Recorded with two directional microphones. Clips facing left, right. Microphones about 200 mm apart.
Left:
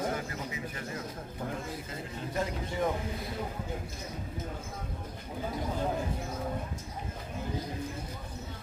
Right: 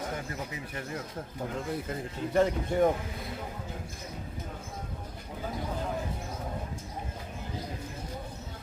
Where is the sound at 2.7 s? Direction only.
55° right (ahead or behind).